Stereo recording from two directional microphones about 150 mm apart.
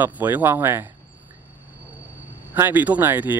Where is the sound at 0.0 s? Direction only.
10° right (ahead or behind).